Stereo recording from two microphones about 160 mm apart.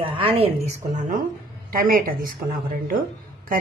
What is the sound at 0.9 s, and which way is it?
Speech, 55° right (ahead or behind).